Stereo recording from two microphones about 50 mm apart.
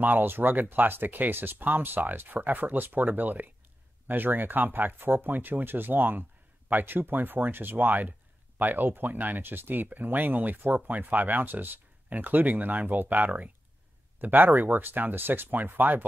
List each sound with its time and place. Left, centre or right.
0.0 s speech: right